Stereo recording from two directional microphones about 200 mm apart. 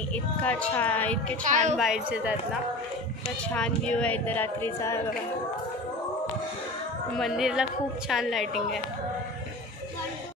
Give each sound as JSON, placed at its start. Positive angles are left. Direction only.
{"t": 0.1, "sound": "speech", "side_deg": 5}
{"t": 1.4, "sound": "a woman's voice", "side_deg": -35}
{"t": 1.8, "sound": "a woman's voice", "side_deg": -5}
{"t": 3.5, "sound": "speech", "side_deg": 5}
{"t": 7.2, "sound": "a woman's voice", "side_deg": 0}